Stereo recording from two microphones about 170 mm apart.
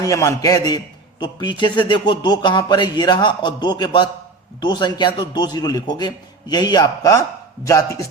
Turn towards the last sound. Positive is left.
turn(degrees=20)  # may be behind; listen again after turning